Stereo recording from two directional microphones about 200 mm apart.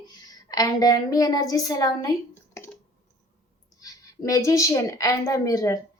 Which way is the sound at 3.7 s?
20° left (ahead or behind).